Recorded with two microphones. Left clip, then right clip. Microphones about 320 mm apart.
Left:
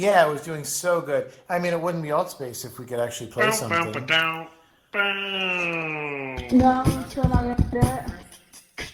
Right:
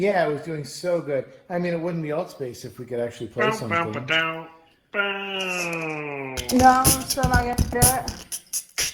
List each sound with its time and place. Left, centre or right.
0.0 s speech: left
3.3 s speech: centre
6.3 s music: right